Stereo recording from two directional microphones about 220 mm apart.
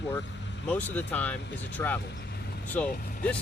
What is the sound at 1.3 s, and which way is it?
Speech, 55° left (ahead or behind).